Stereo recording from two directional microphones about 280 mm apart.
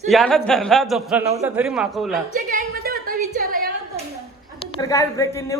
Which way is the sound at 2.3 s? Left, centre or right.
Right.